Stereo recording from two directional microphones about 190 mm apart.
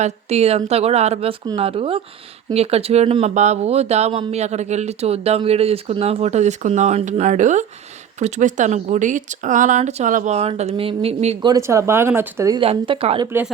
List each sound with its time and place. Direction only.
0.0 s speech: 35° right (ahead or behind)
11.4 s speech: 15° right (ahead or behind)
12.5 s speech: 25° right (ahead or behind)